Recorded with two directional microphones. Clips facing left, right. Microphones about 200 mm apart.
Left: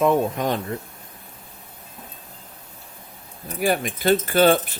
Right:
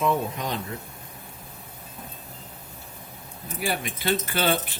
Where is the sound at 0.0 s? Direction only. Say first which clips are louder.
Left 6 dB; 50° left (ahead or behind).